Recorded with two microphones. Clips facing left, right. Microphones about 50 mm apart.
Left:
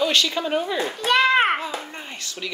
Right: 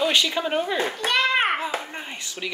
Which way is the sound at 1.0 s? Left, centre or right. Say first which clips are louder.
Left 5 dB; centre.